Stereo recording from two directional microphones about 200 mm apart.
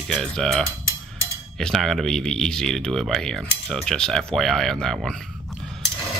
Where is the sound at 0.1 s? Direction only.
Centre (ahead or behind).